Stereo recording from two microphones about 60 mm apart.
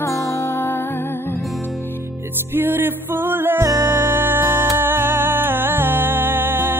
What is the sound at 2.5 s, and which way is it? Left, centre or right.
Music, right.